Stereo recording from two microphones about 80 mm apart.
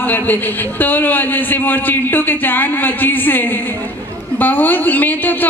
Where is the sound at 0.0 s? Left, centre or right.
Left.